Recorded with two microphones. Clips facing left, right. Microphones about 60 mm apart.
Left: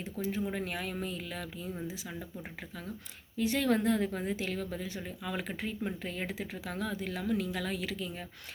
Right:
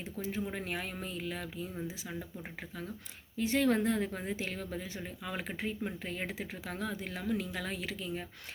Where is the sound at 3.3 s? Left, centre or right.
Right.